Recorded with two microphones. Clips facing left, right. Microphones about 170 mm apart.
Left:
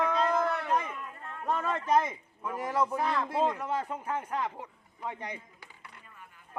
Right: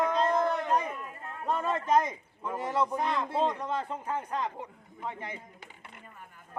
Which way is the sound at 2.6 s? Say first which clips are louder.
Even; 10° left (ahead or behind).